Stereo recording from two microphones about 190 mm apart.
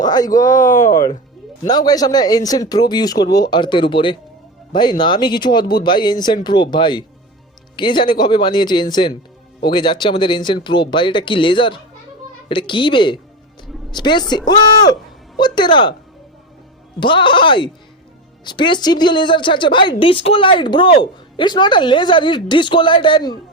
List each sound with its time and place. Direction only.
0.0 s speech: 20° left (ahead or behind)
17.0 s speech: 25° left (ahead or behind)